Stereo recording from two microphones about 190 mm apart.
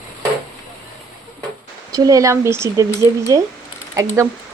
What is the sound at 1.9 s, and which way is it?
Speech, 20° right (ahead or behind).